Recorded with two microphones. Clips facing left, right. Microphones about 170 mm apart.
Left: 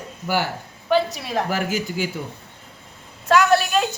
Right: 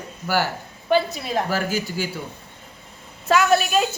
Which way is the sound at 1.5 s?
15° left (ahead or behind).